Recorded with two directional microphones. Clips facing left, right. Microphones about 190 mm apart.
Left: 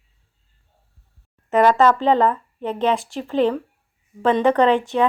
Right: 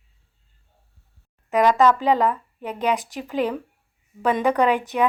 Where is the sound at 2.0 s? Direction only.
10° right (ahead or behind).